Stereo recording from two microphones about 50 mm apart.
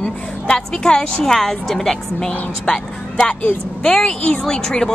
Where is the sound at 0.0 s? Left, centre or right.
Centre.